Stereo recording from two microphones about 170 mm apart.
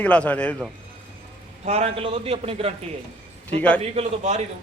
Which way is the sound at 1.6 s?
40° right (ahead or behind).